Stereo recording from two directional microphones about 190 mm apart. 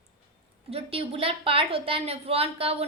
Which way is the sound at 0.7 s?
30° right (ahead or behind).